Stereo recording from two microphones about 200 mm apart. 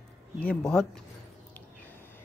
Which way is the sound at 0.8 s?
5° left (ahead or behind).